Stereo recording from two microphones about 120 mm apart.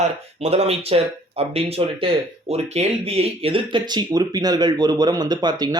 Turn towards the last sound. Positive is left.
turn(degrees=-35)  # may be behind; listen again after turning